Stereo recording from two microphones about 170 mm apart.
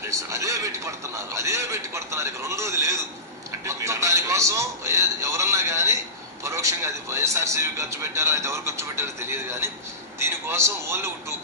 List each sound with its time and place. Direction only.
0.0 s a man's voice: 20° right (ahead or behind)